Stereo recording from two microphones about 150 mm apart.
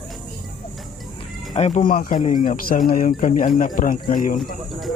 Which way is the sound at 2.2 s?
60° left (ahead or behind).